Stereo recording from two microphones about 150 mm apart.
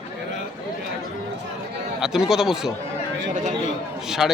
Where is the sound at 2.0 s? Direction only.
5° right (ahead or behind).